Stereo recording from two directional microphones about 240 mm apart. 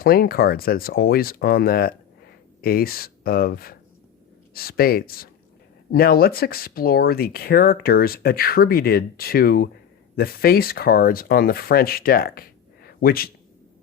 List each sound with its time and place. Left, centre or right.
0.0 s speech: left